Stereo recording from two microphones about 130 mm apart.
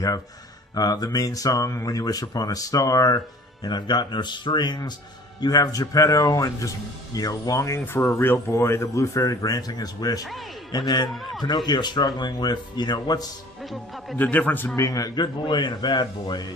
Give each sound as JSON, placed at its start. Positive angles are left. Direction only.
{"t": 0.8, "sound": "speech", "side_deg": 30}
{"t": 11.1, "sound": "a man's voice", "side_deg": 0}
{"t": 11.4, "sound": "speech", "side_deg": 35}
{"t": 13.6, "sound": "speech", "side_deg": 0}
{"t": 14.2, "sound": "a man's voice", "side_deg": 15}
{"t": 14.8, "sound": "speech", "side_deg": 25}